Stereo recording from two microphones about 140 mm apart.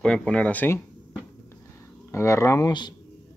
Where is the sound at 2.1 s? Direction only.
20° left (ahead or behind).